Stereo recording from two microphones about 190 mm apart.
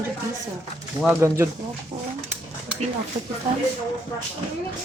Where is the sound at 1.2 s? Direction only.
15° right (ahead or behind).